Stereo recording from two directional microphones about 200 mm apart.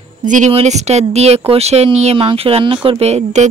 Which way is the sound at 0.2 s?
40° right (ahead or behind).